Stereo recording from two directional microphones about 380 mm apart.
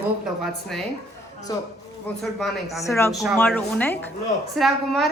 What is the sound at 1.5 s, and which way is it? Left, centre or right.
A woman's voice, centre.